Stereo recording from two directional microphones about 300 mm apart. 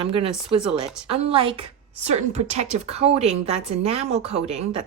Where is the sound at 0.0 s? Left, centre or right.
Centre.